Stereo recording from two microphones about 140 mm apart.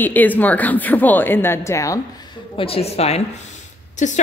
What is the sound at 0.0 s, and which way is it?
Speech, 10° left (ahead or behind).